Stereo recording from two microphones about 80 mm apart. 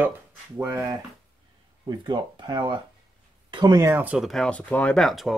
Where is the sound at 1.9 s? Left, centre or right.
Right.